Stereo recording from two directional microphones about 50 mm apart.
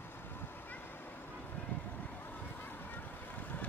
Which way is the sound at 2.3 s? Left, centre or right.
Left.